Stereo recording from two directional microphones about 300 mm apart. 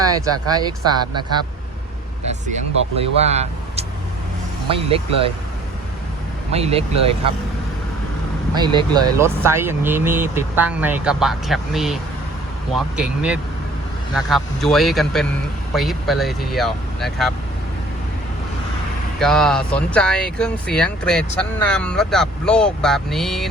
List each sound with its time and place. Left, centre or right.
0.0 s speech: centre
2.9 s speech: centre
6.5 s speech: centre
8.5 s speech: centre
19.2 s speech: centre